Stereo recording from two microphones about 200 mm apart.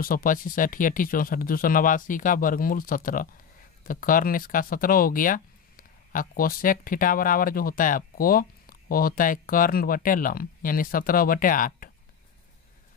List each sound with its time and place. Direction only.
0.0 s speech: 45° left (ahead or behind)